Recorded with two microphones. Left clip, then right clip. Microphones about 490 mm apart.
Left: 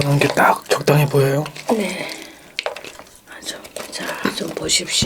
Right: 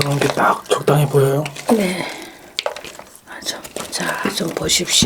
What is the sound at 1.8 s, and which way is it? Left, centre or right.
Speech, right.